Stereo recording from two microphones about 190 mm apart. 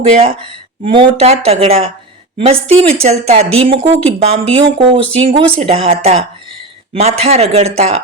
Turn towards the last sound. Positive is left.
turn(degrees=-35)  # may be behind; listen again after turning